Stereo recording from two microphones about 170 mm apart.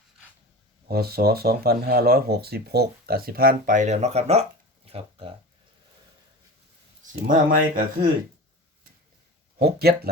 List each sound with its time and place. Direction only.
0.9 s speech: 65° right (ahead or behind); by 5.3 s 35° right (ahead or behind)
7.0 s speech: 50° right (ahead or behind)
9.6 s speech: 65° right (ahead or behind)